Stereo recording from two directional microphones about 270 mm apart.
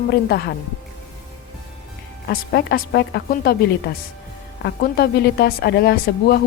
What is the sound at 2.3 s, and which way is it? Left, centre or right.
A woman's voice, left.